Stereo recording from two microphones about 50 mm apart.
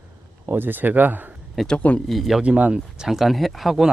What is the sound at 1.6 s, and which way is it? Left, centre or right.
Speech, centre.